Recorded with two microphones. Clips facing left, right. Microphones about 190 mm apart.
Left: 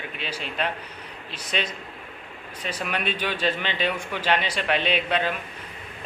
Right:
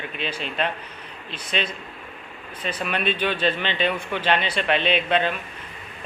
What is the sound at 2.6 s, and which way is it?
A man's voice, 10° left (ahead or behind).